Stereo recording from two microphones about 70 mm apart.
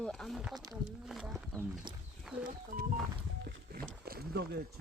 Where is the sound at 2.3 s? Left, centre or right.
Centre.